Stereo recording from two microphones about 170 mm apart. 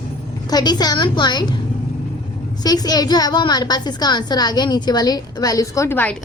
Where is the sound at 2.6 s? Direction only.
20° left (ahead or behind).